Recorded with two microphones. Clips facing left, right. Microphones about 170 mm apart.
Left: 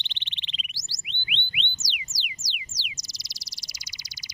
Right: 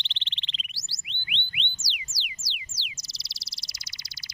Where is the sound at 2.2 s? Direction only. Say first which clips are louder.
Left 2 dB; 15° left (ahead or behind).